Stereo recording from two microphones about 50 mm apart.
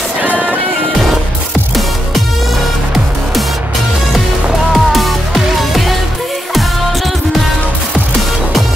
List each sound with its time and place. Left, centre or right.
0.2 s music: right
4.7 s music: centre